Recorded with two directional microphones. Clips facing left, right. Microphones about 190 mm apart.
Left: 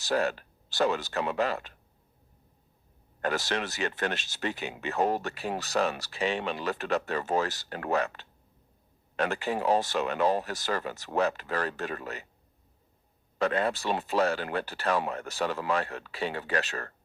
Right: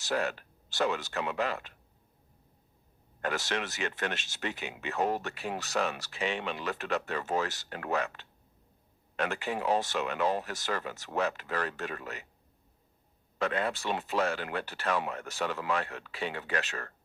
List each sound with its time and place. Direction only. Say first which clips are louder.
0.0 s speech: left 4 dB; 35° left (ahead or behind)
3.2 s speech: left 3 dB; 35° left (ahead or behind)
13.4 s speech: left 4 dB; 35° left (ahead or behind)